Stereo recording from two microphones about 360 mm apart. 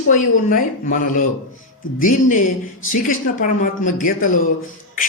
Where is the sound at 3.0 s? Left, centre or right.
Left.